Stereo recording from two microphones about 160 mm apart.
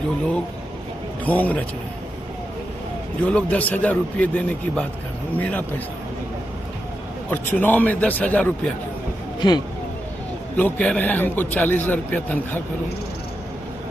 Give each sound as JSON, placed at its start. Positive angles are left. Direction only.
{"t": 1.2, "sound": "a man's voice", "side_deg": 10}
{"t": 3.2, "sound": "a man's voice", "side_deg": 10}
{"t": 7.3, "sound": "a man's voice", "side_deg": 10}
{"t": 9.4, "sound": "speech", "side_deg": 25}
{"t": 10.6, "sound": "a man's voice", "side_deg": 10}